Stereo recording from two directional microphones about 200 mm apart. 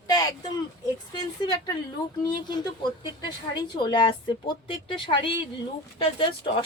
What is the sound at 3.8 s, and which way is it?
A woman's voice, 25° left (ahead or behind).